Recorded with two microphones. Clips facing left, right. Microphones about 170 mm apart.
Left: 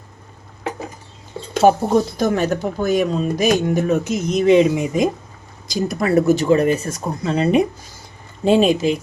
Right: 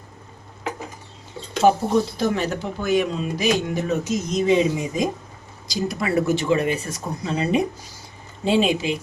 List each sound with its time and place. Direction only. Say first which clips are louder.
1.6 s speech: left 3 dB; 45° left (ahead or behind); by 5.0 s 65° left (ahead or behind)
5.6 s speech: left 5 dB; 50° left (ahead or behind)
8.4 s speech: left 5 dB; 45° left (ahead or behind)